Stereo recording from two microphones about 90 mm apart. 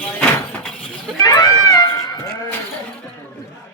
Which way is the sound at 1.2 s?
45° left (ahead or behind).